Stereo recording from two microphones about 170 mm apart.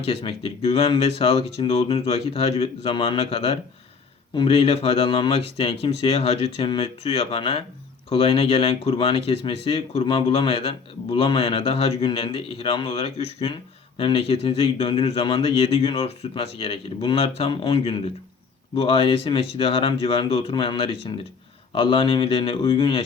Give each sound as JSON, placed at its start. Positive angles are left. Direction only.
{"t": 0.0, "sound": "speech", "side_deg": 35}